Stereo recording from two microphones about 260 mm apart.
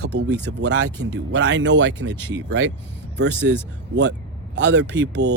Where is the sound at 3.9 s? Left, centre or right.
Right.